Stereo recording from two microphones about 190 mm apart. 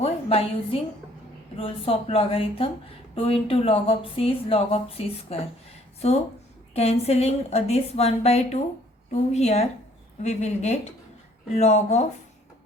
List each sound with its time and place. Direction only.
0.0 s a woman's voice: 30° left (ahead or behind)
6.7 s a woman's voice: 35° left (ahead or behind)